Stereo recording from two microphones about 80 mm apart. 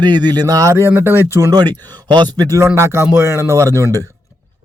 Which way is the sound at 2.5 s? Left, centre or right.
Right.